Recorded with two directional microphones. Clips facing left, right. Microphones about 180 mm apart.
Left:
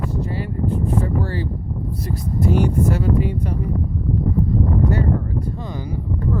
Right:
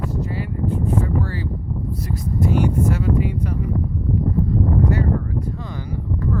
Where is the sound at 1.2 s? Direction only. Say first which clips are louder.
Left 2 dB; 30° left (ahead or behind).